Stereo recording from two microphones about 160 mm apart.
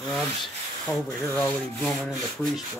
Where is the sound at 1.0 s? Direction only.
20° left (ahead or behind).